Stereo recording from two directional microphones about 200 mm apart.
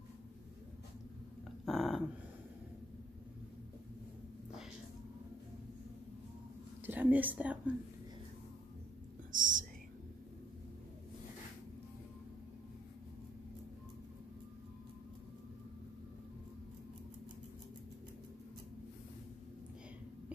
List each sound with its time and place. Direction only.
1.7 s dog: centre (ahead or behind)
6.9 s speech: 10° right (ahead or behind)
9.3 s whispering: 40° right (ahead or behind)